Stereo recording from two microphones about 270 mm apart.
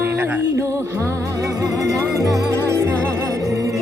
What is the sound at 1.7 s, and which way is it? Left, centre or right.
Music, centre.